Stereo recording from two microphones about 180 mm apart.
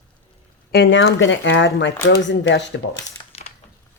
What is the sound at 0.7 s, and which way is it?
Speech, 80° left.